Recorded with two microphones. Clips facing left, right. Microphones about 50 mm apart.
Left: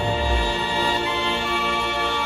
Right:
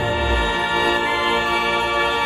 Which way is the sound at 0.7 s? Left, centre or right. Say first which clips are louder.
Right 3 dB; centre.